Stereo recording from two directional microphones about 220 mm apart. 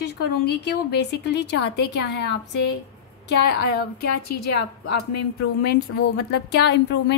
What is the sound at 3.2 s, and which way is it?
Speech, 50° left (ahead or behind).